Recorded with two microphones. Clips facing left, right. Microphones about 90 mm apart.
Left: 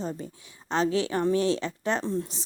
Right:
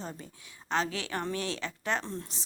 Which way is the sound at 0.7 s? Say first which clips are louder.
Left 6 dB; 20° left (ahead or behind).